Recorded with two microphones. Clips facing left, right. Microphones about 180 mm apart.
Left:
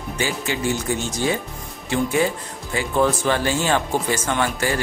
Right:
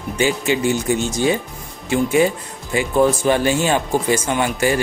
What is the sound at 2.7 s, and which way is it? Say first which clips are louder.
Speech: right 4 dB; 15° right (ahead or behind).